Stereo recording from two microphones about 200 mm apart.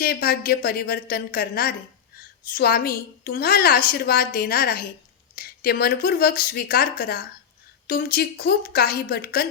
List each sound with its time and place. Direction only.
0.0 s a woman's voice: 50° left (ahead or behind)